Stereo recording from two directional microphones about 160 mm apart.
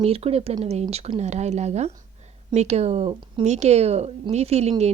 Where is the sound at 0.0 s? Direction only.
40° right (ahead or behind).